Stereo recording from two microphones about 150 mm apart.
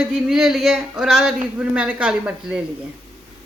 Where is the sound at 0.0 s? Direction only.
5° right (ahead or behind).